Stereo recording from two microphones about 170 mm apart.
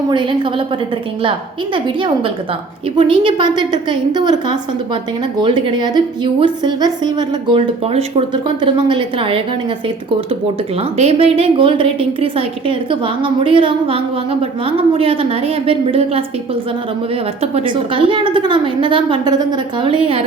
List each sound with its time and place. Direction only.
0.1 s a woman's voice: 30° right (ahead or behind)
10.8 s a woman's voice: 35° right (ahead or behind)
17.4 s a woman's voice: 35° right (ahead or behind)